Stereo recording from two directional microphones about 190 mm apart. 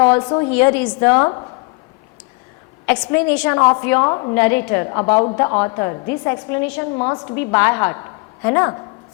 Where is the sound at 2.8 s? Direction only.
10° left (ahead or behind).